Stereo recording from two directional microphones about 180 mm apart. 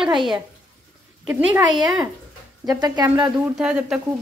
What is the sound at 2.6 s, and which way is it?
Speech, 20° right (ahead or behind).